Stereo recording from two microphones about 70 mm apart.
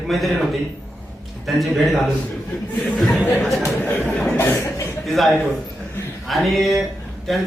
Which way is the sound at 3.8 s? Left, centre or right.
Left.